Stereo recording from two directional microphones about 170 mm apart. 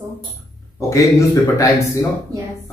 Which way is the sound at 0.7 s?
20° left (ahead or behind).